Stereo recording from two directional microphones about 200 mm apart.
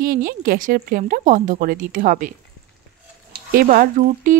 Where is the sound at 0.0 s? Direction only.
45° right (ahead or behind).